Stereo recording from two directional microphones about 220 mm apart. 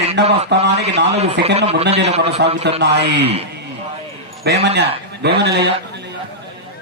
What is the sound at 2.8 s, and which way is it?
Speech, 50° right (ahead or behind).